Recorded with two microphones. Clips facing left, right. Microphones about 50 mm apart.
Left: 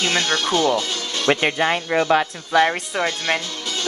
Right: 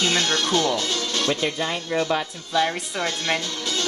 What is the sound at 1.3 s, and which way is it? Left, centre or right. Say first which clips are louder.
Speech: left 10 dB; left.